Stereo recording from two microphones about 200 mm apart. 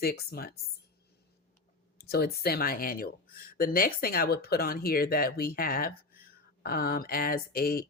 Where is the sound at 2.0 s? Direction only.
50° left (ahead or behind).